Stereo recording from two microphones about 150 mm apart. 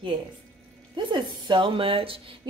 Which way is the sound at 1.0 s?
30° right (ahead or behind).